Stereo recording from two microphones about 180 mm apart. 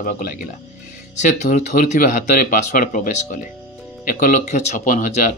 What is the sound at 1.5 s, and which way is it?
Speech, 50° left (ahead or behind).